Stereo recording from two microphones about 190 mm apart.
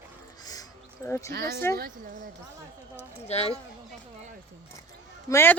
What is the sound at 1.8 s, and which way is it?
Speech, 45° right (ahead or behind).